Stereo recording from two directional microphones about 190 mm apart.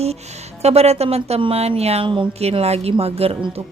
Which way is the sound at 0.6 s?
35° right (ahead or behind).